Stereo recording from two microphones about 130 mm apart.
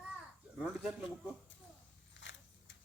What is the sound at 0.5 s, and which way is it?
Speech, 10° right (ahead or behind).